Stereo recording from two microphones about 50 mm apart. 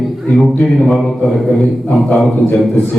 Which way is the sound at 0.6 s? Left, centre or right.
Centre.